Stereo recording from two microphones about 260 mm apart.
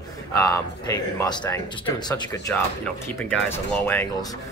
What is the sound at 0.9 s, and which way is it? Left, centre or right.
Speech, centre.